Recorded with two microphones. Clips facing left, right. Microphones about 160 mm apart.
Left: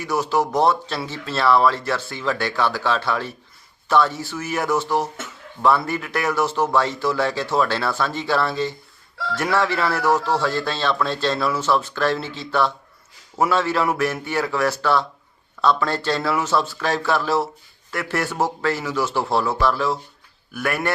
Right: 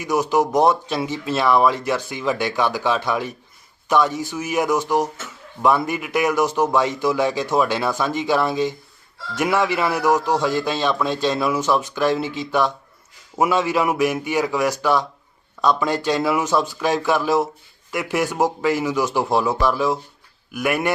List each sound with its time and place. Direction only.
0.0 s a man's voice: 15° right (ahead or behind)